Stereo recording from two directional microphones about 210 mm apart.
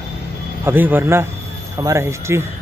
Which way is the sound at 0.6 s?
10° right (ahead or behind).